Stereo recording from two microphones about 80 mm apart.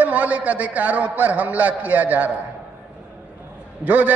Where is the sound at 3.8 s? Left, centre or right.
Centre.